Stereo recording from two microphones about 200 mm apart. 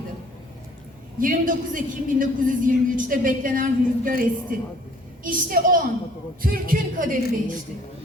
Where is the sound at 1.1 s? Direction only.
45° right (ahead or behind).